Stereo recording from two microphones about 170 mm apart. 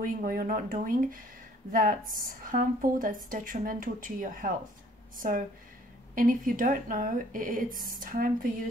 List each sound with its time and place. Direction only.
0.0 s speech: 55° right (ahead or behind)